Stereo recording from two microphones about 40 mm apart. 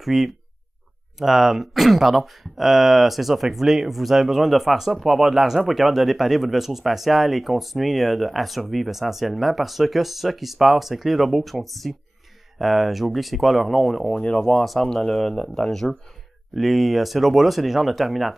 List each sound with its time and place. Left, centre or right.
0.0 s speech: centre
14.9 s speech: centre
16.5 s speech: centre